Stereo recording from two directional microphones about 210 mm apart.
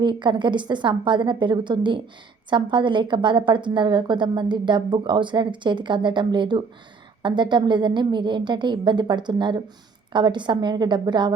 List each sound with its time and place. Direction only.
0.0 s a woman's voice: 20° right (ahead or behind)